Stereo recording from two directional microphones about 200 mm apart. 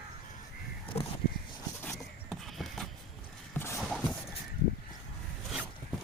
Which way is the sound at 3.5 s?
10° left (ahead or behind).